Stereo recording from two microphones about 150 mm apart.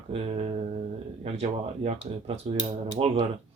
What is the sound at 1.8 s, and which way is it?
Speech, 45° right (ahead or behind).